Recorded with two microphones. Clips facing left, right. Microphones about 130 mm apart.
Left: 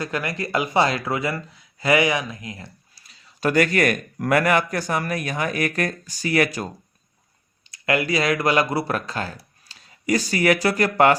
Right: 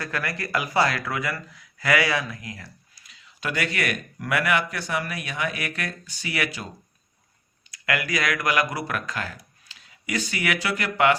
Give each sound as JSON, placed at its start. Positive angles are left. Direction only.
{"t": 0.0, "sound": "speech", "side_deg": 20}
{"t": 7.7, "sound": "speech", "side_deg": 25}